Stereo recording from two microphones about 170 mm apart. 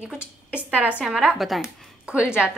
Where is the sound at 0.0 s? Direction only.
5° right (ahead or behind).